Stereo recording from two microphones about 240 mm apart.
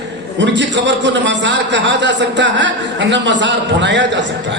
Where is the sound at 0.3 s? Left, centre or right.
Right.